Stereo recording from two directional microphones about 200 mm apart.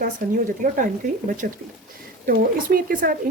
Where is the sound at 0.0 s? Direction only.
40° right (ahead or behind).